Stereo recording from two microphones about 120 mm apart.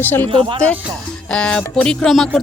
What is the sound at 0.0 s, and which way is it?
Speech, 15° left (ahead or behind).